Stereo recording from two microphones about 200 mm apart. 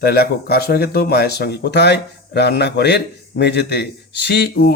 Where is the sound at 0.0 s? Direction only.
50° left (ahead or behind).